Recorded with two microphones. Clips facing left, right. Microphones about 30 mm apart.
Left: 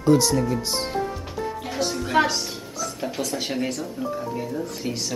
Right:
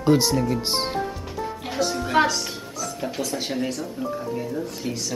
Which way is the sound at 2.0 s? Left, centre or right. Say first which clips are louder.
Even; centre.